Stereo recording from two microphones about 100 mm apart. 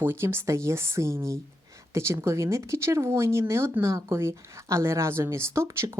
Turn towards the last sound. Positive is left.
turn(degrees=-25)  # may be behind; listen again after turning